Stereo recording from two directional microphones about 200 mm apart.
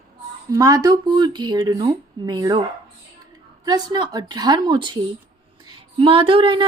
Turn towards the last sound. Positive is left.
turn(degrees=-25)  # may be behind; listen again after turning